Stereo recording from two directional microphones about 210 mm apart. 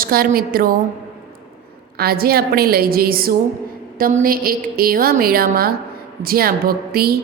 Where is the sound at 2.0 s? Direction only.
45° right (ahead or behind).